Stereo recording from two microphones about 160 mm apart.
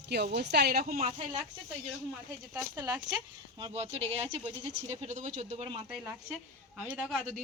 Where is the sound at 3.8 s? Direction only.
40° right (ahead or behind).